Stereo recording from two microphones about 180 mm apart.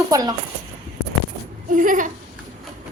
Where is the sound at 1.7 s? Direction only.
45° right (ahead or behind).